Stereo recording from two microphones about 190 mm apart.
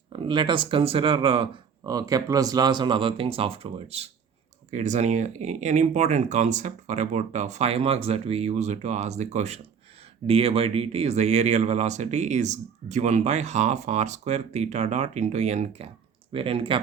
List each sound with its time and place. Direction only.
0.1 s speech: 25° right (ahead or behind)